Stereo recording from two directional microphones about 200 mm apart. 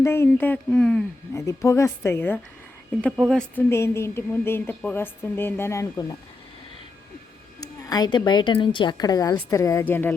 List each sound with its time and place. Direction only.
0.0 s a woman's voice: 10° left (ahead or behind)
3.0 s speech: centre (ahead or behind)
3.5 s a woman's voice: 15° left (ahead or behind)
7.6 s a woman's voice: 20° left (ahead or behind)